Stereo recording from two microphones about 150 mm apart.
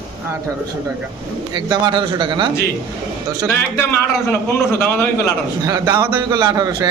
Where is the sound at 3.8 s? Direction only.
15° left (ahead or behind).